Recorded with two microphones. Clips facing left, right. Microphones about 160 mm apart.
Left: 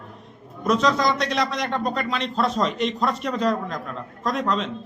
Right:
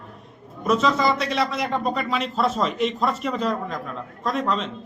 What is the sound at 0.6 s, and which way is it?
A man's voice, 5° right (ahead or behind).